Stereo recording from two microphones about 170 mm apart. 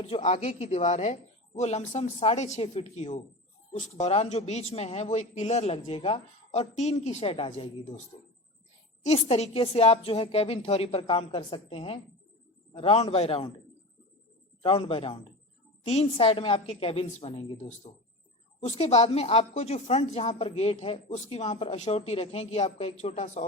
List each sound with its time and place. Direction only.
0.0 s a woman's voice: 40° left (ahead or behind)
14.6 s a woman's voice: 30° left (ahead or behind)